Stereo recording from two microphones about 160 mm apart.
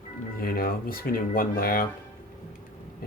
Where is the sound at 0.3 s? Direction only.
65° left (ahead or behind).